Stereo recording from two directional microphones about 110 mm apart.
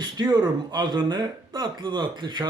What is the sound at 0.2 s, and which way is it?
Speech, 45° right (ahead or behind).